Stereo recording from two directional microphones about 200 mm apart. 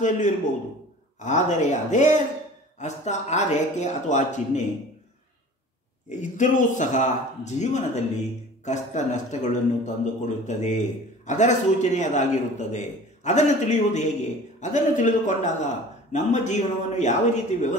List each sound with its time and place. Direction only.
1.2 s a man's voice: 35° left (ahead or behind)
6.0 s a man's voice: 40° left (ahead or behind)